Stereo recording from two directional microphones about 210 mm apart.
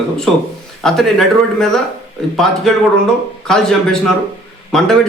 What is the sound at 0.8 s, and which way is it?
A man's voice, centre (ahead or behind).